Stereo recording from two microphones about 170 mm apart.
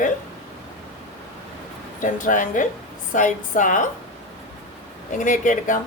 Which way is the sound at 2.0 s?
50° left (ahead or behind).